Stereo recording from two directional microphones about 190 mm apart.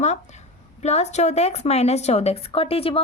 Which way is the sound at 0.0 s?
40° left (ahead or behind).